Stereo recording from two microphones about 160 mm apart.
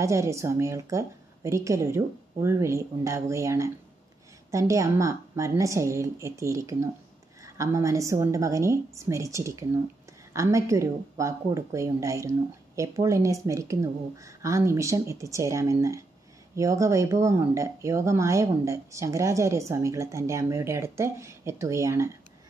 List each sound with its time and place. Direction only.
0.0 s speech: 20° right (ahead or behind)